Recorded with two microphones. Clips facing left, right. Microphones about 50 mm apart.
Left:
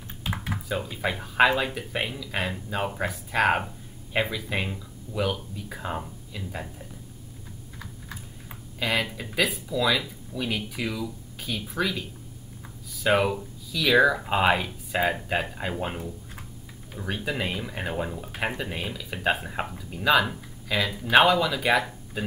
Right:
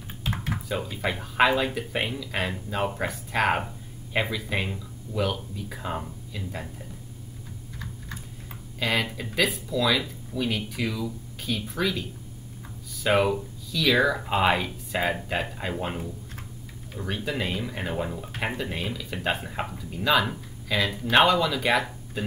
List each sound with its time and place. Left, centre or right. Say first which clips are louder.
0.2 s speech: right 1 dB; centre
8.7 s speech: even; centre
16.9 s speech: even; centre